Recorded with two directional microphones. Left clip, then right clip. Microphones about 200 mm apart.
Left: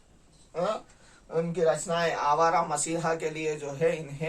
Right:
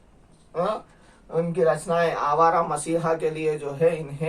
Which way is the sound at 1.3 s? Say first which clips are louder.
Right 4 dB; 25° left (ahead or behind).